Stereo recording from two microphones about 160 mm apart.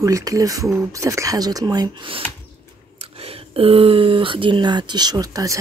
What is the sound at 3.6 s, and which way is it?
Speech, 35° right (ahead or behind).